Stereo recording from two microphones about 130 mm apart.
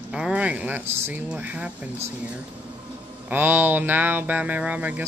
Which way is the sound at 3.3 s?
15° right (ahead or behind).